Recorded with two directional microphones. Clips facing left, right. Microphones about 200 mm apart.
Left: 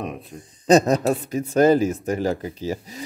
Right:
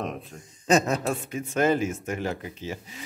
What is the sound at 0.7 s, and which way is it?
Speech, 35° left (ahead or behind).